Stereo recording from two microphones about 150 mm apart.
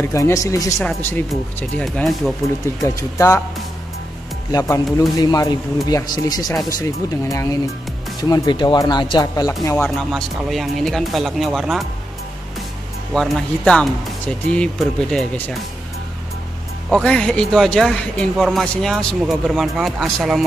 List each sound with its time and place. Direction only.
0.0 s speech: 20° left (ahead or behind)
0.7 s speech: 5° left (ahead or behind)
2.8 s speech: 20° left (ahead or behind)
4.5 s speech: 20° left (ahead or behind)
9.8 s speech: 5° left (ahead or behind)
13.1 s speech: centre (ahead or behind)
16.9 s speech: 5° left (ahead or behind)